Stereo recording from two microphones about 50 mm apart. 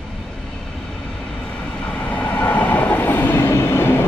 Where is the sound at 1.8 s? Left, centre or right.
Left.